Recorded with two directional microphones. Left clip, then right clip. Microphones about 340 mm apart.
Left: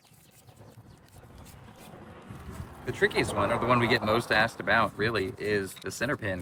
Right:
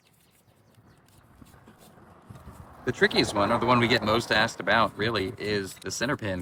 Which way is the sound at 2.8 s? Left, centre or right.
Centre.